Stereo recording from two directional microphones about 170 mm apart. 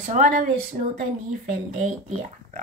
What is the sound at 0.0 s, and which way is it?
Speech, 50° right (ahead or behind).